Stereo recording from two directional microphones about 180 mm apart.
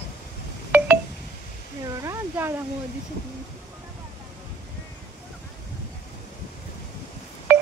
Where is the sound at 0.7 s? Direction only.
10° right (ahead or behind).